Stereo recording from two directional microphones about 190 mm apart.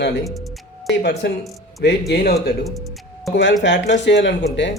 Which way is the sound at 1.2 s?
65° left (ahead or behind).